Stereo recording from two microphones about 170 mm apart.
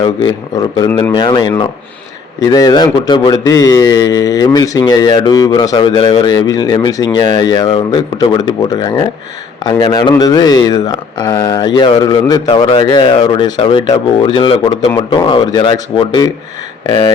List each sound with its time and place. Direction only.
0.0 s speech: 25° left (ahead or behind)